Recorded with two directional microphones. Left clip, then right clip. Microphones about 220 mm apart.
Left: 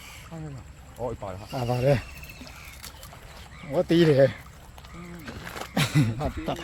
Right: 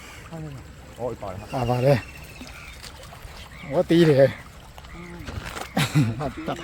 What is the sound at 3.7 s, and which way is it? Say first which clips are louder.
Speech: right 3 dB; 5° left (ahead or behind).